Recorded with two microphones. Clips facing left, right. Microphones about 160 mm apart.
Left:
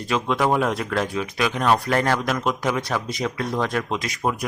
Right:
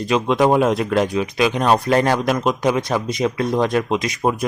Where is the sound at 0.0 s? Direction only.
20° right (ahead or behind).